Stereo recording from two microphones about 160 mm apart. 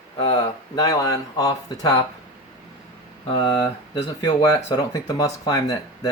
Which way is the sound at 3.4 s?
30° left (ahead or behind).